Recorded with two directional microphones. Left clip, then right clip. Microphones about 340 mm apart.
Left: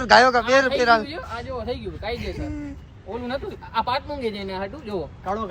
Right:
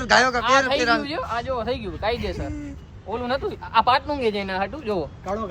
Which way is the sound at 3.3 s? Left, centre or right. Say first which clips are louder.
Right 6 dB; centre.